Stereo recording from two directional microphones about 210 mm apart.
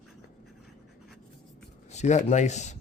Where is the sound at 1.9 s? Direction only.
35° left (ahead or behind).